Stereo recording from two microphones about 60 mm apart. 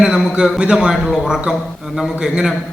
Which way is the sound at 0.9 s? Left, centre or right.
Centre.